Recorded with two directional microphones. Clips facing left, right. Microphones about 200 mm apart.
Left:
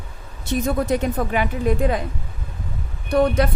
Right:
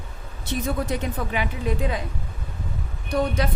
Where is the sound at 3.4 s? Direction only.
55° left (ahead or behind).